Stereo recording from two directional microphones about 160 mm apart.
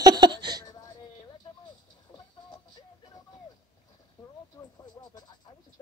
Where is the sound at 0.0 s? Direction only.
25° right (ahead or behind).